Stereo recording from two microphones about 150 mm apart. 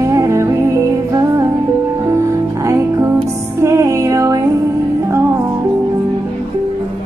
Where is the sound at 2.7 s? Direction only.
20° right (ahead or behind).